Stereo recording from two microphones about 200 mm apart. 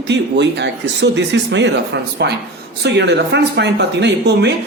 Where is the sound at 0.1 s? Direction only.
60° right (ahead or behind).